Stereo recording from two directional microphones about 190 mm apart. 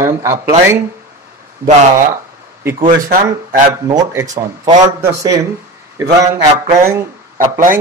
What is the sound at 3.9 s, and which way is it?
Speech, 15° right (ahead or behind).